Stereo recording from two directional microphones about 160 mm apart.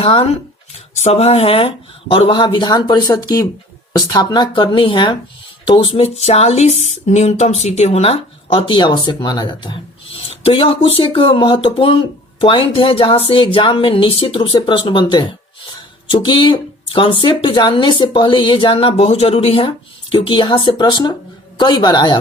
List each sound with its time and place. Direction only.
0.0 s speech: 35° left (ahead or behind)